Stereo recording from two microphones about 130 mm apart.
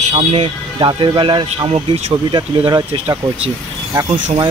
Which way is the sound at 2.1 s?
35° right (ahead or behind).